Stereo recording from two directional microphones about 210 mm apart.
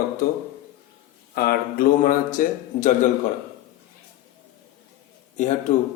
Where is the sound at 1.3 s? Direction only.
45° left (ahead or behind).